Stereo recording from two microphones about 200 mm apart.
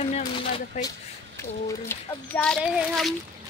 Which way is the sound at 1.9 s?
5° left (ahead or behind).